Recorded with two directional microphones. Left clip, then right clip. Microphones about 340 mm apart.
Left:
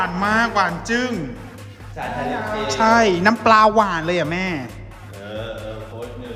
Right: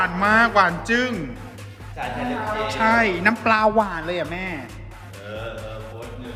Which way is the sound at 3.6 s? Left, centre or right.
Right.